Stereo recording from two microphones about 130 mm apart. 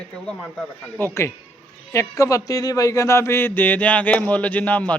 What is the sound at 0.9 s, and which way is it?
A man's voice, 20° left (ahead or behind).